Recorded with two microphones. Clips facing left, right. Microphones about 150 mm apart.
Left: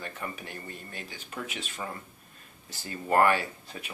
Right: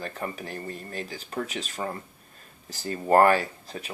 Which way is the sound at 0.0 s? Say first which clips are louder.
Right 5 dB; 35° right (ahead or behind).